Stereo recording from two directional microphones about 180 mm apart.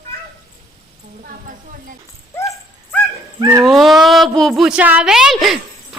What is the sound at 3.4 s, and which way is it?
Speech, 15° right (ahead or behind).